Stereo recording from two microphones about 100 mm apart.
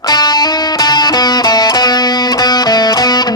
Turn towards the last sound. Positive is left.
turn(degrees=45)  # may be behind; listen again after turning